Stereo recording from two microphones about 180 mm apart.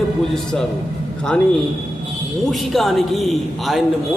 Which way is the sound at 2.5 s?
Centre (ahead or behind).